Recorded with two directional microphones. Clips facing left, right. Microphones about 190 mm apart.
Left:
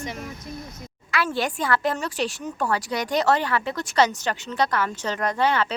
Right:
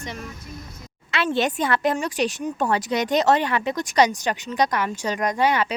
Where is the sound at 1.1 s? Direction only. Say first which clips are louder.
Right 3 dB; 25° right (ahead or behind).